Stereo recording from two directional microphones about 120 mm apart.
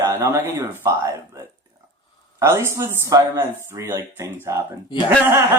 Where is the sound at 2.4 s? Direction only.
20° right (ahead or behind).